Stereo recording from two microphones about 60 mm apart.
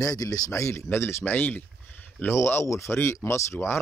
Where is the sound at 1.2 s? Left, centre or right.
Left.